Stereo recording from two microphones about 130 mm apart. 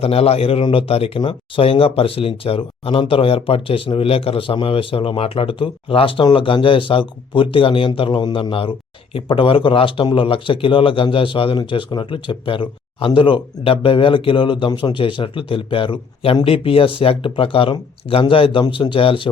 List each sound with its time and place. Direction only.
0.0 s speech: 50° left (ahead or behind)